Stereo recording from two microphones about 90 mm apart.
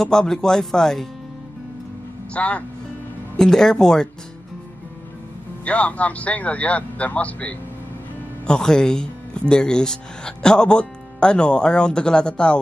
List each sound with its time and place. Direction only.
0.0 s speech: 5° left (ahead or behind)
2.3 s speech: 15° left (ahead or behind)
5.7 s speech: 15° left (ahead or behind)